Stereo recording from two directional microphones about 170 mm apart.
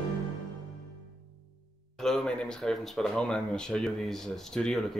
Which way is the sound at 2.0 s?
5° left (ahead or behind).